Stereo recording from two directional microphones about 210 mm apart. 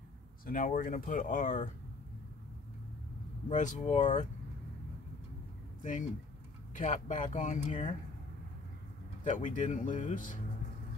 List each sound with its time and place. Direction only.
0.5 s speech: 40° left (ahead or behind)
3.4 s speech: 35° left (ahead or behind)
5.8 s speech: 35° left (ahead or behind)
9.2 s speech: 35° left (ahead or behind)